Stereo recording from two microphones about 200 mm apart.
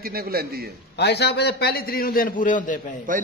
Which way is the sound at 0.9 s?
55° left (ahead or behind).